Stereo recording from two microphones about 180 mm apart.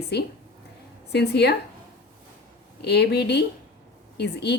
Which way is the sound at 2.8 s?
70° left (ahead or behind).